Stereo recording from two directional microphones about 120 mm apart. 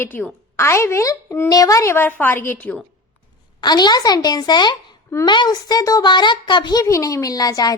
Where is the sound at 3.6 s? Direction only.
35° left (ahead or behind).